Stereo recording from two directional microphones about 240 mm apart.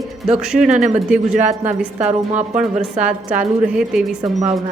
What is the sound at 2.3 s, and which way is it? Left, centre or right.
Speech, right.